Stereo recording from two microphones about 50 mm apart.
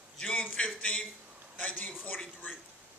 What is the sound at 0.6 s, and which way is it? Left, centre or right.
Speech, left.